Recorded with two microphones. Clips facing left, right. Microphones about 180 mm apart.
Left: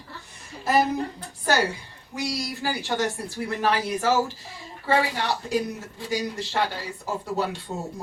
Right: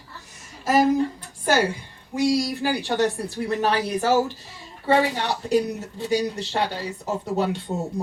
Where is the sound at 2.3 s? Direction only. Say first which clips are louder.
Right 7 dB; 15° right (ahead or behind).